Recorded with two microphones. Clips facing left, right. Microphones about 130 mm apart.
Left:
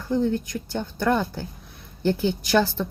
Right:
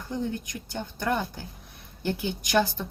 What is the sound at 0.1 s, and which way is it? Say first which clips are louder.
Speech: left 8 dB; 15° right (ahead or behind).